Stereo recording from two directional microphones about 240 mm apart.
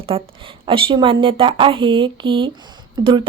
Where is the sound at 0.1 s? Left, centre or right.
Right.